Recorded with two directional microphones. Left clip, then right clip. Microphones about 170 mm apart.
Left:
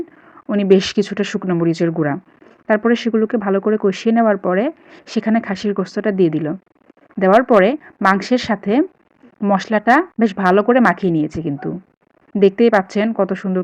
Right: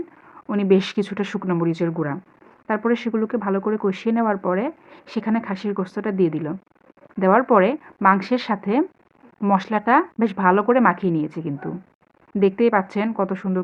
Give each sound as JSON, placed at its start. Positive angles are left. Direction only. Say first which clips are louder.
{"t": 0.4, "sound": "speech", "louder": "left 5 dB", "side_deg": 30}